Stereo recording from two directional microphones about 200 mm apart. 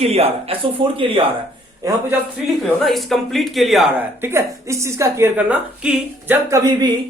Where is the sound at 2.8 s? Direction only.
Centre (ahead or behind).